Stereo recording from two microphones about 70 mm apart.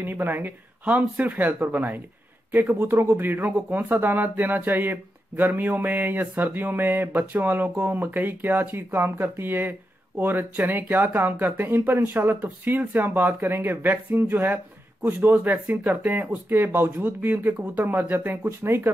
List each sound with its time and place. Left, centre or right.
0.0 s speech: right